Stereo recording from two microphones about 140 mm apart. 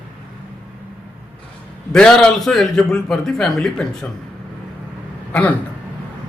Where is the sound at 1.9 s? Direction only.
5° left (ahead or behind).